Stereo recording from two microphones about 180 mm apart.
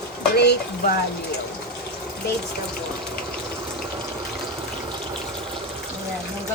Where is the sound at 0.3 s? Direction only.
65° left (ahead or behind).